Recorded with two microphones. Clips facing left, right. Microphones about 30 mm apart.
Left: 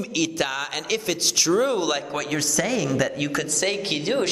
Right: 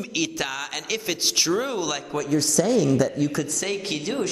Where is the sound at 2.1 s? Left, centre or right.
Left.